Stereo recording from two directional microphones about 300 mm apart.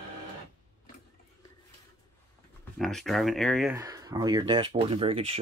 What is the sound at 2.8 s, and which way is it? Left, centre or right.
Speech, centre.